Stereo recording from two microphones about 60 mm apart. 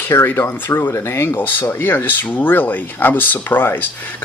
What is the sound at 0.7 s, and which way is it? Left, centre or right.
Speech, left.